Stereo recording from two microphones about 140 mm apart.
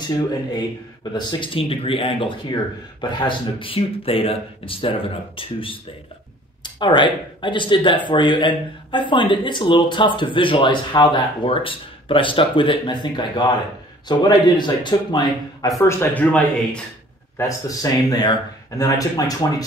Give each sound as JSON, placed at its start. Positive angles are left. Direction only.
{"t": 1.1, "sound": "speech", "side_deg": 40}
{"t": 15.8, "sound": "speech", "side_deg": 15}
{"t": 17.4, "sound": "speech", "side_deg": 25}